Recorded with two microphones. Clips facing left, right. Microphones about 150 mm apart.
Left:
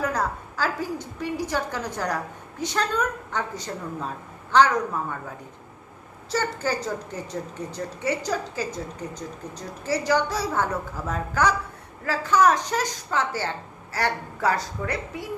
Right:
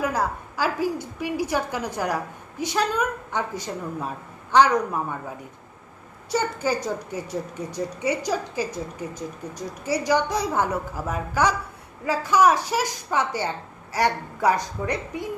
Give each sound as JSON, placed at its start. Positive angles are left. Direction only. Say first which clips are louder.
{"t": 0.0, "sound": "a woman's voice", "louder": "right 1 dB", "side_deg": -10}
{"t": 6.3, "sound": "a woman's voice", "louder": "right 2 dB", "side_deg": -10}